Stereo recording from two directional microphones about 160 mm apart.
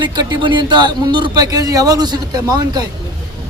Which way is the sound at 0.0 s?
30° right (ahead or behind).